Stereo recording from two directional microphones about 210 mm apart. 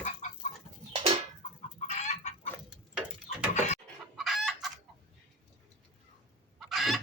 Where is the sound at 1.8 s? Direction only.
35° left (ahead or behind).